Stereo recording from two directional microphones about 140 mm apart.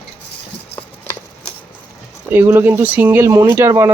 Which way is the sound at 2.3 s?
15° right (ahead or behind).